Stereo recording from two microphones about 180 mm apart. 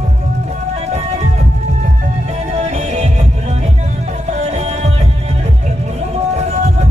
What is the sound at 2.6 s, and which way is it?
Music, 40° right (ahead or behind).